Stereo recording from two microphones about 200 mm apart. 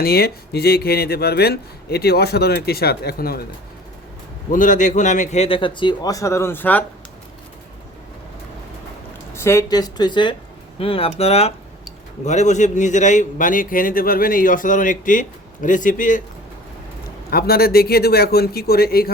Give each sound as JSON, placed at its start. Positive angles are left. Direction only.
{"t": 0.0, "sound": "speech", "side_deg": 50}
{"t": 4.5, "sound": "a man's voice", "side_deg": 40}
{"t": 9.3, "sound": "a man's voice", "side_deg": 15}
{"t": 17.3, "sound": "speech", "side_deg": 50}